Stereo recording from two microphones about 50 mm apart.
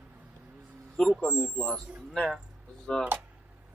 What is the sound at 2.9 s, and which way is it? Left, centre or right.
Speech, centre.